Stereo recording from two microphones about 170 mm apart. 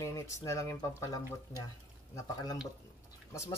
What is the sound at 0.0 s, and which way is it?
Speech, 20° left (ahead or behind).